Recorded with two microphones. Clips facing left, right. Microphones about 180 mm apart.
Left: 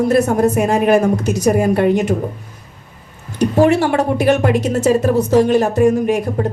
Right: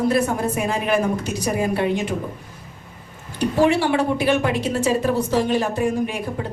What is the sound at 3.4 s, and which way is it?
A woman's voice, 45° left (ahead or behind).